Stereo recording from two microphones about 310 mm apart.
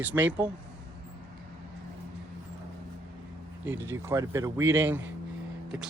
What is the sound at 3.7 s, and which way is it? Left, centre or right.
Speech, centre.